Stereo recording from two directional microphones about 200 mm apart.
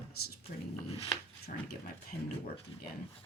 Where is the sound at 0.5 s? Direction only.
45° left (ahead or behind).